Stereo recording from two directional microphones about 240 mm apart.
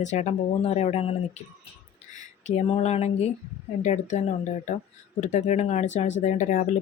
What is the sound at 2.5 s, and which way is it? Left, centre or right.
Speech, left.